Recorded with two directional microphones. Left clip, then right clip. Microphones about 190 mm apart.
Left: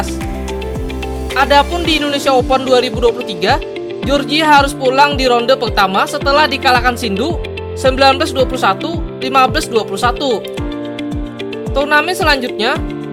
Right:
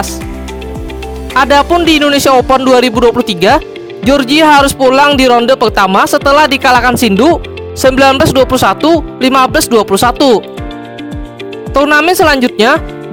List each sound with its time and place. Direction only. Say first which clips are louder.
1.3 s speech: right 4 dB; 50° right (ahead or behind)
11.7 s speech: right 6 dB; 50° right (ahead or behind)